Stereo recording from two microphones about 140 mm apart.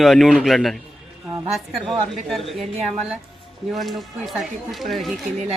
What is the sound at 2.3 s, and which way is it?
Speech, centre (ahead or behind).